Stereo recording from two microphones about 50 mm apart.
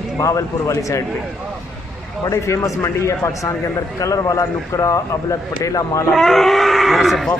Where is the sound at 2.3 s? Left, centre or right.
Left.